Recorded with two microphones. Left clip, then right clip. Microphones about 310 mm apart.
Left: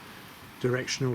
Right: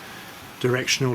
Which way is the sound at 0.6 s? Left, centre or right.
Centre.